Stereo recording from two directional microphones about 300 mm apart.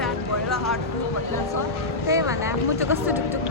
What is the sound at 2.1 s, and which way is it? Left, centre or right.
Speech, centre.